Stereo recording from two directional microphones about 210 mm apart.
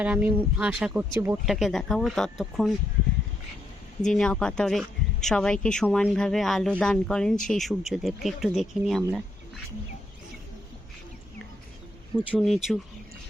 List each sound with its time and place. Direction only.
0.0 s speech: 5° right (ahead or behind)
4.0 s speech: 5° left (ahead or behind)
12.1 s speech: centre (ahead or behind)